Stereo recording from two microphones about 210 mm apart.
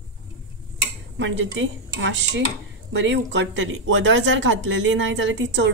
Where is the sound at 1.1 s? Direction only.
65° right (ahead or behind).